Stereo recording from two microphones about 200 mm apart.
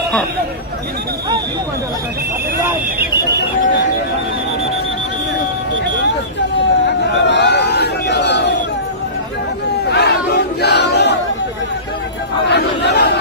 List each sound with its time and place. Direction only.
6.6 s a sound: 60° left (ahead or behind)
9.8 s battle cry: 55° left (ahead or behind)
12.5 s chatter: 55° left (ahead or behind)